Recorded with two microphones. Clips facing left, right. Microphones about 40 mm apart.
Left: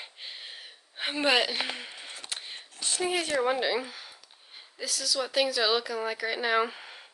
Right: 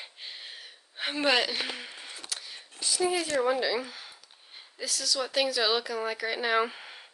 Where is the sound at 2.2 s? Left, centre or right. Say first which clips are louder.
Left 1 dB; left.